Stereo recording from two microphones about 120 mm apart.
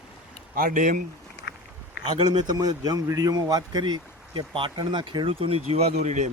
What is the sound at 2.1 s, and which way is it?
Speech, 35° right (ahead or behind).